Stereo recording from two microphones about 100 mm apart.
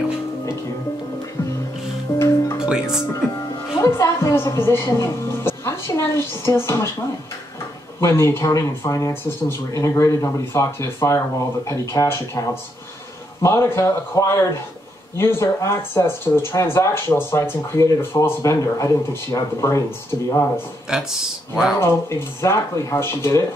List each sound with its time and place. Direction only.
2.1 s music: 25° left (ahead or behind)
2.6 s music: 10° right (ahead or behind)
3.8 s speech: 30° left (ahead or behind)
8.0 s speech: 25° left (ahead or behind)
20.9 s speech: 5° right (ahead or behind)
22.4 s speech: 30° left (ahead or behind)